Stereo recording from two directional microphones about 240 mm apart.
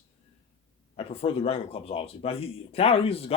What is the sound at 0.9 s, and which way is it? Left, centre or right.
A man's voice, left.